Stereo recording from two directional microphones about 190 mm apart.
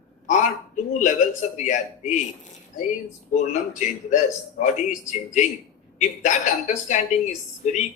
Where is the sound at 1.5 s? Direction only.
40° left (ahead or behind).